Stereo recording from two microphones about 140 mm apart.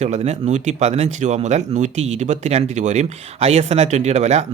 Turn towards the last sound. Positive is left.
turn(degrees=-50)  # may be behind; listen again after turning